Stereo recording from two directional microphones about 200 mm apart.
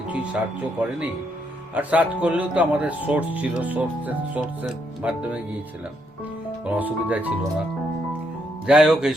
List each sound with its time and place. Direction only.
0.8 s speech: 10° right (ahead or behind)
5.0 s music: 5° right (ahead or behind)
6.7 s speech: 10° right (ahead or behind)
8.6 s music: 5° right (ahead or behind)